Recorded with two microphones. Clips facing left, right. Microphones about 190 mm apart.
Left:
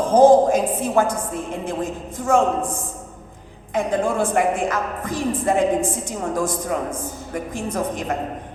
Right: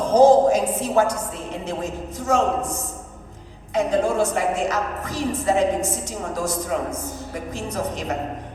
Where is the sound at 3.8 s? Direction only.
55° left (ahead or behind).